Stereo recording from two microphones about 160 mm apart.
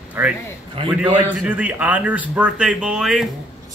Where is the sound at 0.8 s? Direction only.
35° right (ahead or behind).